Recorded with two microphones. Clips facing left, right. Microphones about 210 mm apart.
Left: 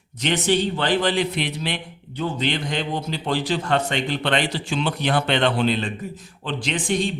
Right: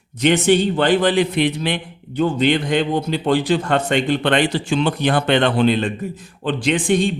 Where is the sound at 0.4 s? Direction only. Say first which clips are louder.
Right 6 dB; 55° right (ahead or behind).